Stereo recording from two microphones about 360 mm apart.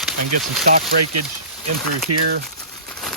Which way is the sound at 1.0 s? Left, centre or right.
Right.